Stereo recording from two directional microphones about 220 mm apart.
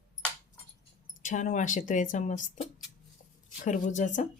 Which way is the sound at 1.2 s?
35° left (ahead or behind).